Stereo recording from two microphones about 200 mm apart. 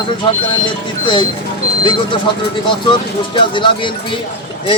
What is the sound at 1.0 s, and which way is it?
Speech, 25° left (ahead or behind).